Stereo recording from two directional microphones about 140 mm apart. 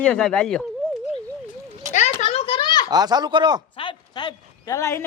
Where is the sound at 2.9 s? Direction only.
30° right (ahead or behind).